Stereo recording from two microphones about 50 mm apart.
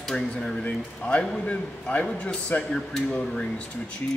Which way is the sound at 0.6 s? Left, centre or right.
Left.